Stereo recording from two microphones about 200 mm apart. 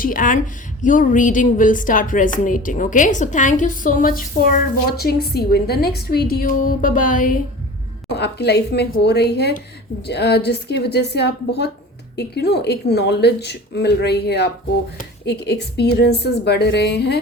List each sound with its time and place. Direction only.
0.0 s a woman's voice: 45° left (ahead or behind)
8.1 s a woman's voice: 55° left (ahead or behind)